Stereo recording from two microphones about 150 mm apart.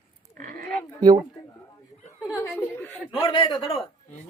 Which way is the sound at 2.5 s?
15° left (ahead or behind).